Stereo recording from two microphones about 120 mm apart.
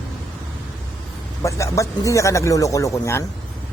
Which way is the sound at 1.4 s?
25° left (ahead or behind).